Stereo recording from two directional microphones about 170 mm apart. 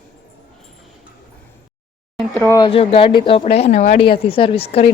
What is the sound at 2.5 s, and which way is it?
A woman's voice, 30° left (ahead or behind).